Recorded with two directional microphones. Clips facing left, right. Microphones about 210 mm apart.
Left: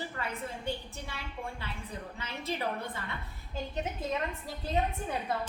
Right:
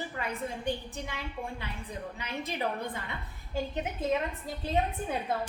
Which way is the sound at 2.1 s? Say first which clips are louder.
Even; 15° right (ahead or behind).